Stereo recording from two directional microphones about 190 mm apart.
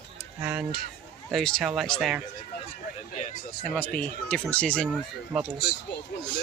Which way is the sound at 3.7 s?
10° left (ahead or behind).